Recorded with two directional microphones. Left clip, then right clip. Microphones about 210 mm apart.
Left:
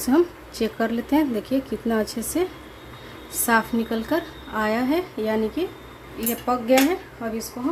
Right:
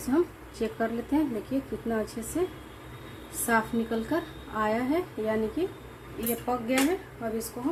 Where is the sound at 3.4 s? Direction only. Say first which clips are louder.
Left 6 dB; 20° left (ahead or behind).